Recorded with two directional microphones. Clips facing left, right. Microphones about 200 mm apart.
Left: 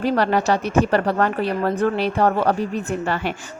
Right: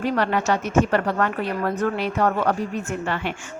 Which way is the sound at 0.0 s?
35° left (ahead or behind).